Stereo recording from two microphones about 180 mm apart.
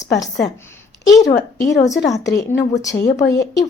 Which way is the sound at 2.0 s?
20° left (ahead or behind).